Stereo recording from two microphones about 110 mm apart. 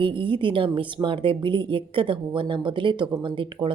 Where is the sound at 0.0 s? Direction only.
50° right (ahead or behind).